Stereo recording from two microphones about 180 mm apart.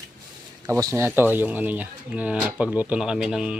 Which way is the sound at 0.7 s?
15° right (ahead or behind).